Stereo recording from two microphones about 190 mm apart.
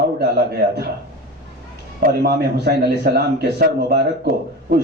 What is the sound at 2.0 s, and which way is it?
A man's voice, 55° right (ahead or behind).